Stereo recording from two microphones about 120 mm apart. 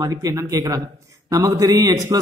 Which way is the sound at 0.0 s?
30° right (ahead or behind).